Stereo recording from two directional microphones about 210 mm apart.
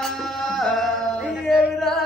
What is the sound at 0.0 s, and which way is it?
Music, centre (ahead or behind).